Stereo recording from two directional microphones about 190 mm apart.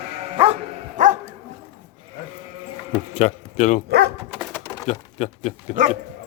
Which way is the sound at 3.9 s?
55° right (ahead or behind).